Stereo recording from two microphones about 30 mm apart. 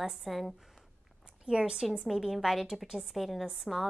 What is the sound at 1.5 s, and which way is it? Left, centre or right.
Speech, right.